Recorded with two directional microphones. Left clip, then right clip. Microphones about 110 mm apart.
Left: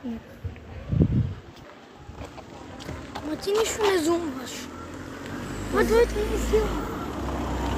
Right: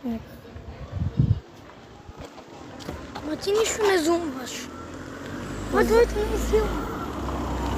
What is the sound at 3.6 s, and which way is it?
Vehicle, 15° left (ahead or behind).